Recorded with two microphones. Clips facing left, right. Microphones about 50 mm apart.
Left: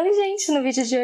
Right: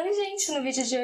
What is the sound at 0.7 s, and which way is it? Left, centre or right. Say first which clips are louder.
Speech: left 6 dB; left.